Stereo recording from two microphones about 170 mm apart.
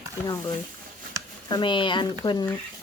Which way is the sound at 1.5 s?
30° left (ahead or behind).